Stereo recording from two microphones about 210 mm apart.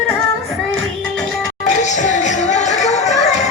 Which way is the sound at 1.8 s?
35° left (ahead or behind).